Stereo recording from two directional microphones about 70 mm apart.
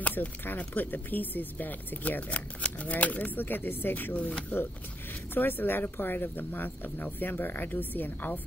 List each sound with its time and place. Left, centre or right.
0.0 s speech: left